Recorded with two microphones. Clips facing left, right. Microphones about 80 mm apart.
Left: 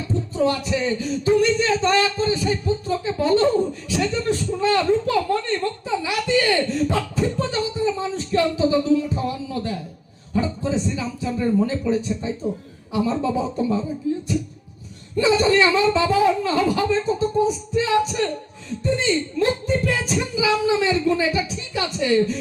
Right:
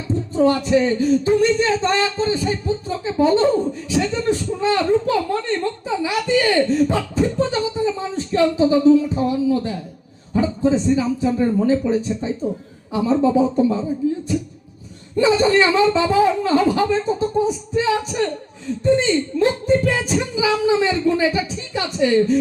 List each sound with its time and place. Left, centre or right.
0.3 s speech: right
15.1 s speech: right